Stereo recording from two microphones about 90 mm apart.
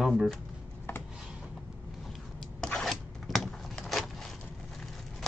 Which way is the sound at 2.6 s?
10° left (ahead or behind).